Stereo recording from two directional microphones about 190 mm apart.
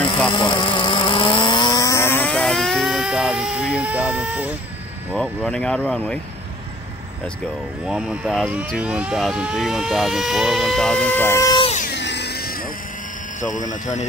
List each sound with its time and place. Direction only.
0.3 s vehicle: 25° left (ahead or behind); by 4.6 s 5° right (ahead or behind)
5.1 s speech: 5° left (ahead or behind)
7.8 s speech: 5° right (ahead or behind); by 11.6 s 15° left (ahead or behind)
11.6 s music: 35° left (ahead or behind)
11.9 s music: 65° left (ahead or behind)
13.4 s speech: 40° left (ahead or behind)